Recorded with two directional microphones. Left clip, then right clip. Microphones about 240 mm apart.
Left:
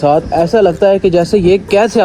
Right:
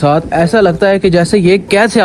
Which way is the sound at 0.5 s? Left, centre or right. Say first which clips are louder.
Left 1 dB; right.